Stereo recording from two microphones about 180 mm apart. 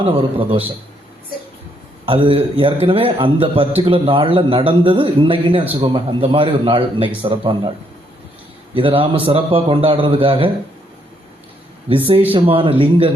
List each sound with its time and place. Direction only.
0.0 s a man's voice: 30° right (ahead or behind)
2.0 s a man's voice: 30° right (ahead or behind)
8.7 s a man's voice: 30° right (ahead or behind)
12.3 s a man's voice: 30° right (ahead or behind)